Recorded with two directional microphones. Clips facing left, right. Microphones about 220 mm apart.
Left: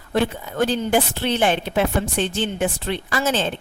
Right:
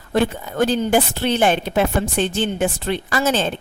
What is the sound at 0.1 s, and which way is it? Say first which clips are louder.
A woman's voice: right 2 dB; 45° right (ahead or behind).